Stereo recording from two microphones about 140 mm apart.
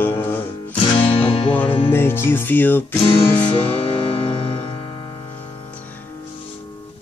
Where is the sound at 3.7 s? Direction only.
40° left (ahead or behind).